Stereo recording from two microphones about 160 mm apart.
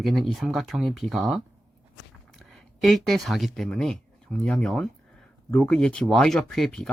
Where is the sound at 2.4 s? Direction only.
Centre (ahead or behind).